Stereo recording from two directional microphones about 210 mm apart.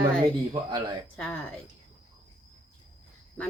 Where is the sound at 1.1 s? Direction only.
5° left (ahead or behind).